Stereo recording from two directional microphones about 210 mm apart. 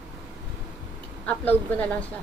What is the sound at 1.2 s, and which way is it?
Speech, 5° left (ahead or behind).